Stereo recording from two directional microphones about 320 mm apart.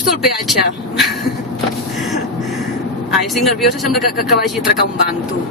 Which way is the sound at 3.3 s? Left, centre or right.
Centre.